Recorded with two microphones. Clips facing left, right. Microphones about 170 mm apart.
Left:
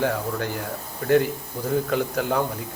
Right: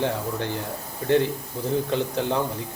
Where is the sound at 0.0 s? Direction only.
25° right (ahead or behind).